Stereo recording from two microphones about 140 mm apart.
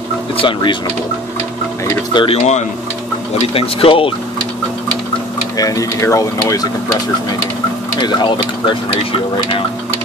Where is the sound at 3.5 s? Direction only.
40° left (ahead or behind).